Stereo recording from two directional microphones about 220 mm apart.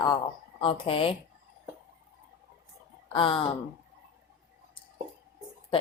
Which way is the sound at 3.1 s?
25° left (ahead or behind).